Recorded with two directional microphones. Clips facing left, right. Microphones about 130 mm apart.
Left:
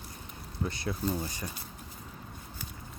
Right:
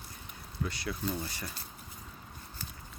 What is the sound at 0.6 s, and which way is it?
Speech, 25° left (ahead or behind).